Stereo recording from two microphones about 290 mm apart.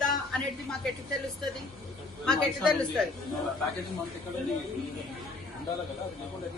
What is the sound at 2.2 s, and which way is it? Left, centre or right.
Speech, centre.